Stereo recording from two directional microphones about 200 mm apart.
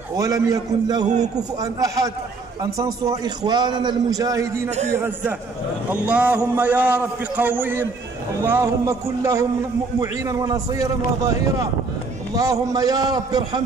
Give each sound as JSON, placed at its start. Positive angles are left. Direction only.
{"t": 0.1, "sound": "a man's voice", "side_deg": -15}
{"t": 1.0, "sound": "a man's voice", "side_deg": -35}
{"t": 1.3, "sound": "a man's voice", "side_deg": -15}
{"t": 4.6, "sound": "a man's voice", "side_deg": -35}
{"t": 4.9, "sound": "a man's voice", "side_deg": -10}